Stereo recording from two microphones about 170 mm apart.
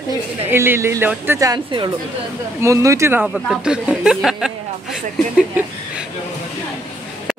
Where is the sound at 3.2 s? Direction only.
5° right (ahead or behind).